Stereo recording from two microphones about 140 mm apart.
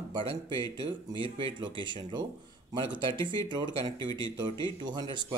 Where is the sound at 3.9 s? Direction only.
30° left (ahead or behind).